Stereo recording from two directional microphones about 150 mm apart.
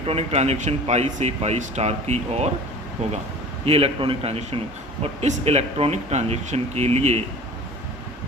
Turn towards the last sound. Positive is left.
turn(degrees=-45)  # may be behind; listen again after turning